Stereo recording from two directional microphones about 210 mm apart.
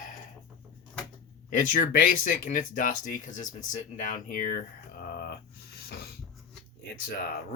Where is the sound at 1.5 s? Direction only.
40° left (ahead or behind).